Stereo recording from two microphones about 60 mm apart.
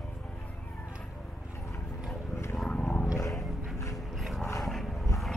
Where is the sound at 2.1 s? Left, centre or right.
Centre.